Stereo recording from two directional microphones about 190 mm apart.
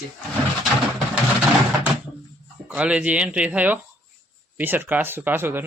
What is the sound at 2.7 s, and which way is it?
Speech, 5° right (ahead or behind).